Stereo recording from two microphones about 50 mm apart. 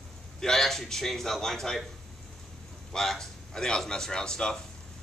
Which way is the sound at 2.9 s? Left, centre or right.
Centre.